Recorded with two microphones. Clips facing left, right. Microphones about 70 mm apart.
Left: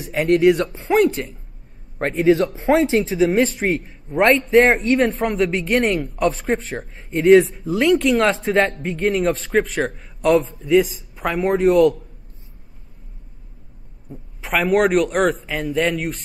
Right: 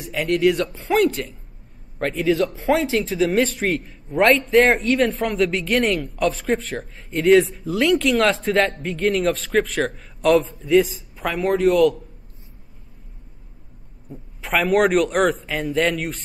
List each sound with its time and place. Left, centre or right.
0.0 s a man's voice: left
0.6 s speech: left
2.0 s a man's voice: left
3.3 s a man's voice: centre
5.2 s speech: centre
5.6 s a man's voice: centre
6.2 s a man's voice: centre
11.4 s a man's voice: left
14.0 s a man's voice: centre